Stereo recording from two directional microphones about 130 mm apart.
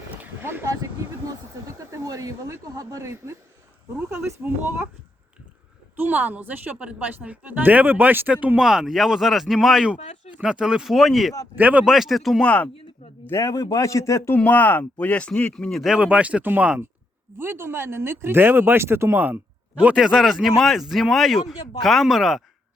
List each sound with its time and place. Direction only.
0.2 s speech: 15° right (ahead or behind)
6.0 s a woman's voice: 15° right (ahead or behind)
11.5 s speech: 10° right (ahead or behind); by 12.7 s 10° left (ahead or behind)
13.2 s a man's voice: 25° left (ahead or behind)
14.3 s a woman's voice: 10° left (ahead or behind)